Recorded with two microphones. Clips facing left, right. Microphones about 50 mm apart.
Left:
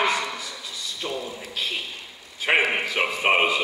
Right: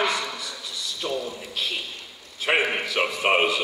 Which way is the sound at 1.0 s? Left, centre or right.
Centre.